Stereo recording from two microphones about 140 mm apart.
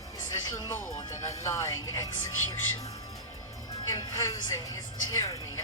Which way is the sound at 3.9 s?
25° left (ahead or behind).